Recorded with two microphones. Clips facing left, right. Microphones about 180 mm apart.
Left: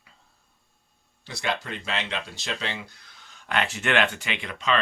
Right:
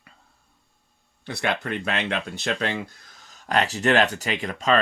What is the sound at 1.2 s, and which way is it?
Speech, 60° right (ahead or behind).